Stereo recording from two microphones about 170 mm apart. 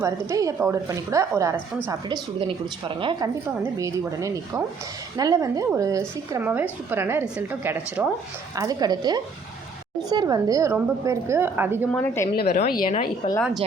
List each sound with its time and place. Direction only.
0.0 s speech: 20° right (ahead or behind)
2.5 s speech: 30° right (ahead or behind)
3.6 s a woman's voice: 20° right (ahead or behind)
11.9 s a woman's voice: 15° left (ahead or behind)
12.6 s a woman's voice: 60° left (ahead or behind)
13.2 s speech: 35° left (ahead or behind)